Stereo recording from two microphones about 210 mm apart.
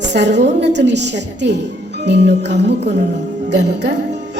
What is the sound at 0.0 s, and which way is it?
A woman's voice, 55° right (ahead or behind).